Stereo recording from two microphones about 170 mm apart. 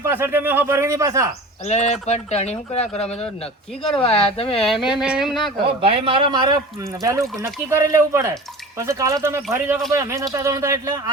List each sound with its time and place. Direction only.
0.0 s speech: 15° right (ahead or behind)
1.6 s speech: 40° left (ahead or behind)
4.6 s speech: centre (ahead or behind)
5.8 s a man's voice: 30° right (ahead or behind)